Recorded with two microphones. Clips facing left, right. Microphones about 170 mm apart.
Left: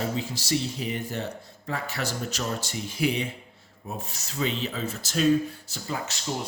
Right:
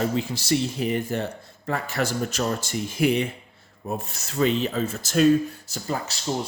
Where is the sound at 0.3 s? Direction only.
55° right (ahead or behind).